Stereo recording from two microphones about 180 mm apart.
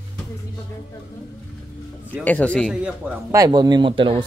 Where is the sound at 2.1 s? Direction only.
10° left (ahead or behind).